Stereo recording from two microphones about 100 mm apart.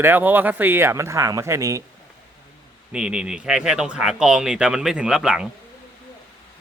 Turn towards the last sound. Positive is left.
turn(degrees=-5)  # may be behind; listen again after turning